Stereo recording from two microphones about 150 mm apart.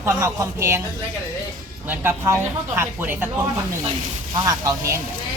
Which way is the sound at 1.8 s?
15° right (ahead or behind).